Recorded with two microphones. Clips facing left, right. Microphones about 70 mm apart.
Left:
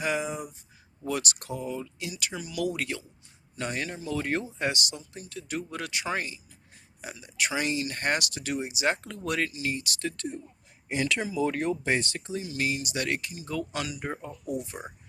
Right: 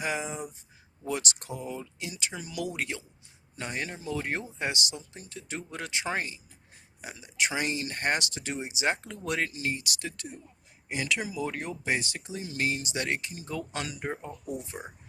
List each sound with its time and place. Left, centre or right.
0.0 s a sound: centre
1.0 s speech: right
9.5 s speech: right
9.7 s speech: right
12.4 s speech: right